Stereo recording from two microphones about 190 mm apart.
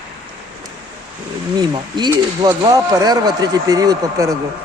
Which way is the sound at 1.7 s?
25° right (ahead or behind).